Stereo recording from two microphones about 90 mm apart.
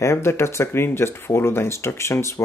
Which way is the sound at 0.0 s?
30° left (ahead or behind).